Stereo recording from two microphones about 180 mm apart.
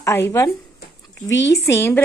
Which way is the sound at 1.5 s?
15° left (ahead or behind).